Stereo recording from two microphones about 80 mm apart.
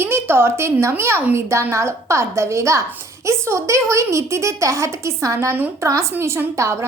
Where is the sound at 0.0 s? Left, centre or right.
Right.